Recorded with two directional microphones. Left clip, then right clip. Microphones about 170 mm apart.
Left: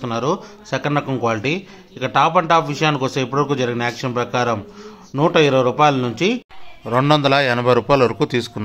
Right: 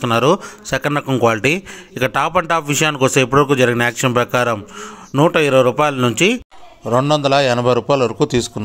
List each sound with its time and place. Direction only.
0.0 s a man's voice: 30° right (ahead or behind)